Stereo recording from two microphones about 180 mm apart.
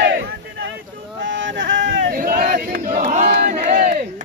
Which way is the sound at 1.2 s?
90° right.